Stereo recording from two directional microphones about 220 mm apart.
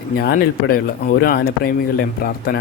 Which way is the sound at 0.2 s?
45° left (ahead or behind).